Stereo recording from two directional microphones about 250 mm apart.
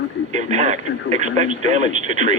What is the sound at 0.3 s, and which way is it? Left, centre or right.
Speech, right.